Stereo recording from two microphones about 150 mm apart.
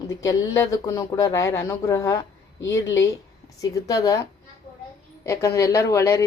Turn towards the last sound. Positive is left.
turn(degrees=20)  # may be behind; listen again after turning